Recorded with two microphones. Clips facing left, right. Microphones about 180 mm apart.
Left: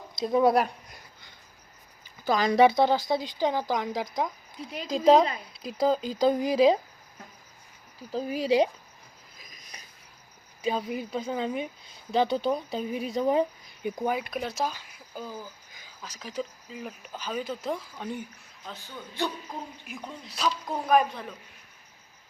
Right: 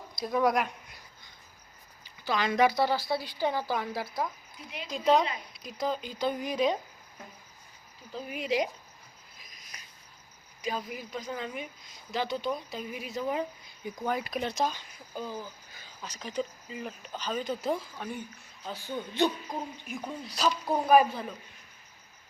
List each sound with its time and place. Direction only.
0.2 s speech: 25° left (ahead or behind)
2.2 s speech: 40° left (ahead or behind)
2.6 s a woman's voice: 20° left (ahead or behind)
4.9 s speech: 35° left (ahead or behind)
8.1 s speech: 35° left (ahead or behind)
10.6 s speech: 30° left (ahead or behind)
14.0 s speech: 5° left (ahead or behind)
17.9 s speech: 20° left (ahead or behind)
18.6 s a man's voice: 10° right (ahead or behind)
19.9 s speech: 5° right (ahead or behind)